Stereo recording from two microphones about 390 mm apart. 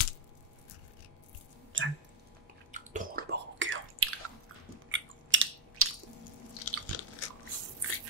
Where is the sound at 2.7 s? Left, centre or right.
Right.